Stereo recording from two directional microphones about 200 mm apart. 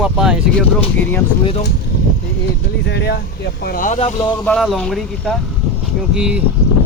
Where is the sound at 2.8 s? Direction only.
55° left (ahead or behind).